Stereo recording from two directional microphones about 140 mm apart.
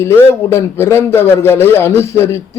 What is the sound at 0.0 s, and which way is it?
A man's voice, 20° left (ahead or behind).